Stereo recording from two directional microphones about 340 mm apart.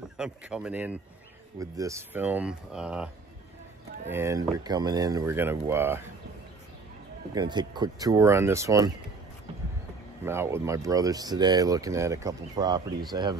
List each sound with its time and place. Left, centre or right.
0.2 s speech: centre
4.1 s speech: centre
7.3 s speech: centre
10.2 s speech: centre